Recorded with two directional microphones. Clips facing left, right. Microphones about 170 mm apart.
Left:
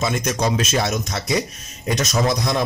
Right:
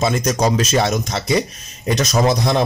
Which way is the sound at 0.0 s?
35° right (ahead or behind).